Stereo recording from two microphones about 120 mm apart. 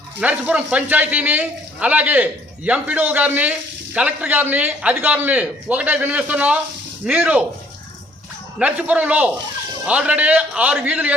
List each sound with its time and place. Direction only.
0.2 s speech: 10° right (ahead or behind)
8.5 s speech: 10° right (ahead or behind)